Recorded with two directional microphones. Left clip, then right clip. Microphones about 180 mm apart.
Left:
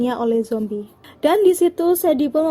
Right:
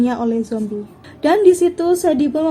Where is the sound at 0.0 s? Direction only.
40° left (ahead or behind).